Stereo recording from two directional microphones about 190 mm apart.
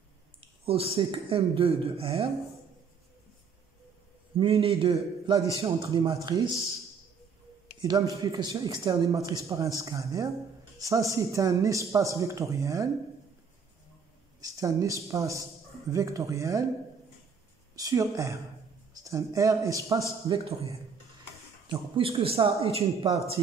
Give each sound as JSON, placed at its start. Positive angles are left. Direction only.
{"t": 0.4, "sound": "speech", "side_deg": -30}
{"t": 4.4, "sound": "speech", "side_deg": -30}
{"t": 4.9, "sound": "a man's voice", "side_deg": -20}
{"t": 7.8, "sound": "a man's voice", "side_deg": -20}
{"t": 14.4, "sound": "a man's voice", "side_deg": -15}
{"t": 17.7, "sound": "a man's voice", "side_deg": -20}
{"t": 21.6, "sound": "speech", "side_deg": -25}